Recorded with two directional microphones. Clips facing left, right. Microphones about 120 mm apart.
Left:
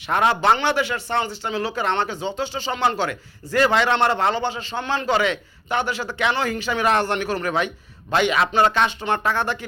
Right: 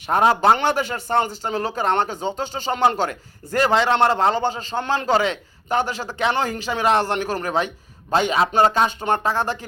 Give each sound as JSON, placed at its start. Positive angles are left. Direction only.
{"t": 0.1, "sound": "speech", "side_deg": -40}